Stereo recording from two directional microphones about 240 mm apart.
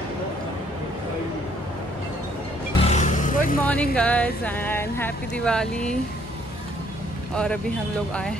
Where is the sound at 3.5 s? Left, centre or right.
Centre.